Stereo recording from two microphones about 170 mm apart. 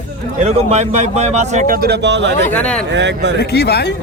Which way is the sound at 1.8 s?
90° right.